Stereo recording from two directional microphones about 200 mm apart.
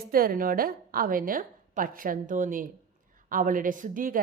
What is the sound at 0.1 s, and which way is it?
A woman's voice, 45° right (ahead or behind).